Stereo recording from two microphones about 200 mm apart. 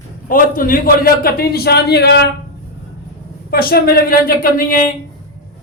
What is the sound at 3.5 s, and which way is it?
A man's voice, 50° left (ahead or behind).